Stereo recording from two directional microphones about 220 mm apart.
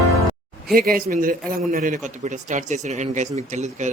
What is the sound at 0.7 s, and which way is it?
Speech, 40° right (ahead or behind).